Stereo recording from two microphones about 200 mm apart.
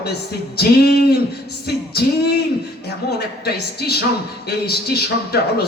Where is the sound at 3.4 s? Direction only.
55° left (ahead or behind).